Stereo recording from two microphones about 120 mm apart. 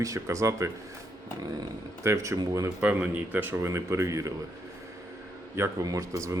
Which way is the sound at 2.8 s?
15° right (ahead or behind).